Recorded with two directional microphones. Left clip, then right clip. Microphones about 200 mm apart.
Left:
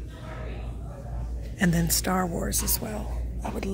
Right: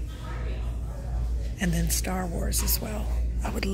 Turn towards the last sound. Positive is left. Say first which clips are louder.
# right 1 dB
turn(degrees=0)  # may be behind; listen again after turning